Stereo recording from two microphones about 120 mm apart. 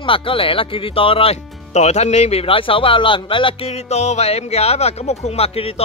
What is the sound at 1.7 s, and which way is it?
A man's voice, 70° left (ahead or behind).